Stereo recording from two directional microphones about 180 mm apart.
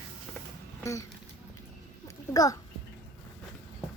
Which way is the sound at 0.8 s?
15° left (ahead or behind).